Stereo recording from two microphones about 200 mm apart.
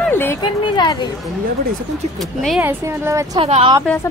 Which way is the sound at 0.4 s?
20° left (ahead or behind).